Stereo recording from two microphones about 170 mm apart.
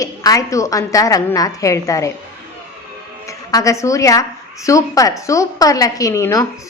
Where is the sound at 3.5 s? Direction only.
20° left (ahead or behind).